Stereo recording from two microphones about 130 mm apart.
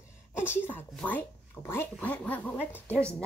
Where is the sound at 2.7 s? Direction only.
15° right (ahead or behind).